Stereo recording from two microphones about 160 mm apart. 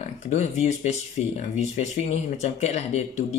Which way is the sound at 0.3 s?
45° left (ahead or behind).